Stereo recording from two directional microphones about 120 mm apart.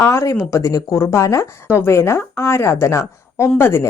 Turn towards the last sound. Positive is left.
turn(degrees=20)  # may be behind; listen again after turning